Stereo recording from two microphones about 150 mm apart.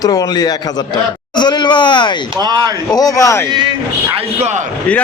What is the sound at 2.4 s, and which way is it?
Speech, 25° right (ahead or behind).